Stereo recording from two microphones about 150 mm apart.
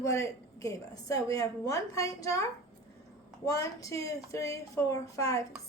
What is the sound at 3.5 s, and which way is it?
Speech, 20° left (ahead or behind).